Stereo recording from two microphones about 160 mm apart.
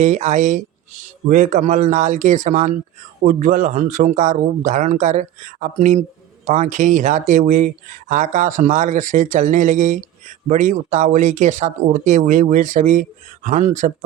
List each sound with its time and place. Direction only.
0.0 s speech: 50° right (ahead or behind)